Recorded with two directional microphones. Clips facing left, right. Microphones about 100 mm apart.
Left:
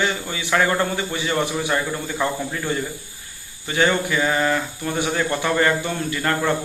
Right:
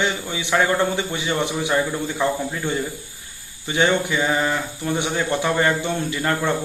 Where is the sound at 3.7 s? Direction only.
20° right (ahead or behind).